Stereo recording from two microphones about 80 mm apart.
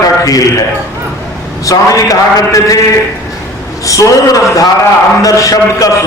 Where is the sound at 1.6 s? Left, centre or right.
Left.